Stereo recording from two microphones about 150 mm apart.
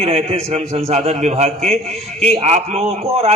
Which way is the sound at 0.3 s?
45° right (ahead or behind).